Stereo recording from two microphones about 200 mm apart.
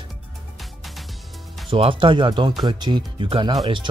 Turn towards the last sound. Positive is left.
turn(degrees=-25)  # may be behind; listen again after turning